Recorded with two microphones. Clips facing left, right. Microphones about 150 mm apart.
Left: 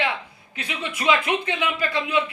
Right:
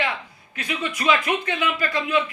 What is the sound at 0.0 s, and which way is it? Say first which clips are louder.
A man's voice: left 1 dB; 20° left (ahead or behind).